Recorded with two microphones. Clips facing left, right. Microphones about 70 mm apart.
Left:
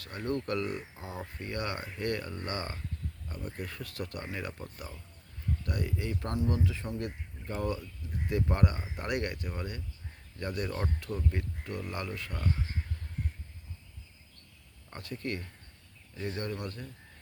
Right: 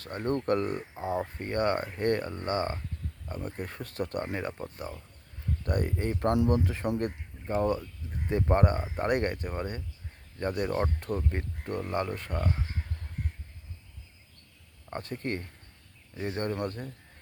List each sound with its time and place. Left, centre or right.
0.0 s speech: right
5.6 s speech: right
7.4 s speech: right
14.8 s speech: right